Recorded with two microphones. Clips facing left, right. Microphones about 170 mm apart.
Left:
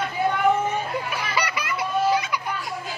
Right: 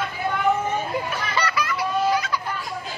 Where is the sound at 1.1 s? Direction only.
15° left (ahead or behind).